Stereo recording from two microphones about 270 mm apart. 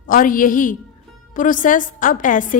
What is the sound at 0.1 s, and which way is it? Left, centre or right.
A woman's voice, left.